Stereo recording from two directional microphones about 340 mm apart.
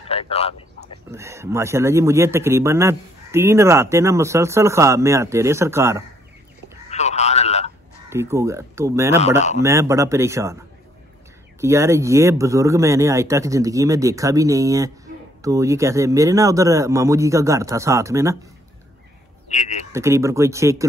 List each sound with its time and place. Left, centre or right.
0.1 s speech: centre
1.1 s speech: centre
6.9 s a sound: centre
8.1 s speech: centre
11.6 s speech: centre
19.9 s speech: centre